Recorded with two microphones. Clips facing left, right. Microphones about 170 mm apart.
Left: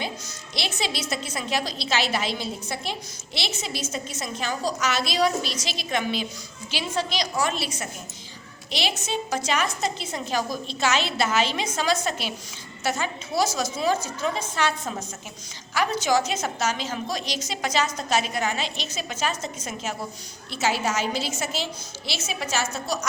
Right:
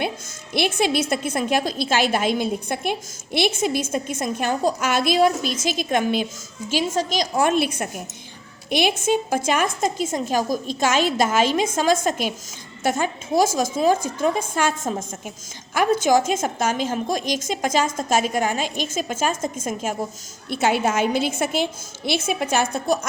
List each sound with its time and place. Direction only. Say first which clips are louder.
0.5 s a woman's voice: right 9 dB; 55° right (ahead or behind)